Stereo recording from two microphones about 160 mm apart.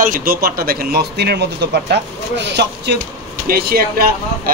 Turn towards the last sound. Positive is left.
turn(degrees=-70)  # may be behind; listen again after turning